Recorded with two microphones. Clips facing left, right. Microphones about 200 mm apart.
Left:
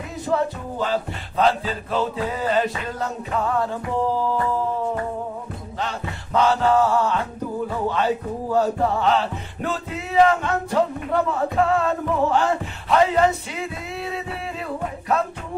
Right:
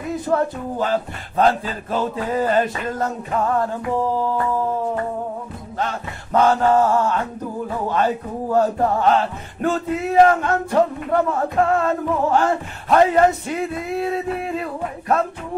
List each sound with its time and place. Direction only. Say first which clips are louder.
0.3 s music: right 1 dB; 50° right (ahead or behind)
5.8 s music: right 3 dB; 50° right (ahead or behind)